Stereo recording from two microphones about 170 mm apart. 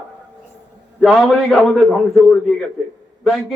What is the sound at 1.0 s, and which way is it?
A man's voice, centre (ahead or behind).